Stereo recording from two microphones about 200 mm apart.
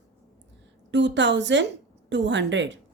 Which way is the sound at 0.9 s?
65° right (ahead or behind).